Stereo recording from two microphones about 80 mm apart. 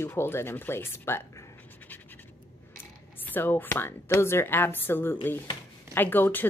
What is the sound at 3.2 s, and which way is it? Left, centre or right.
Speech, left.